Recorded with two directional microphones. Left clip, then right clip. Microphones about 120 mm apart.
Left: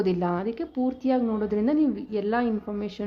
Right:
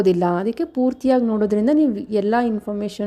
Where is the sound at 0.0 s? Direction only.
55° right (ahead or behind).